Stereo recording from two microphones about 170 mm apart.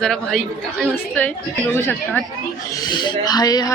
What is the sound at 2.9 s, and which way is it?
Speech, 25° left (ahead or behind).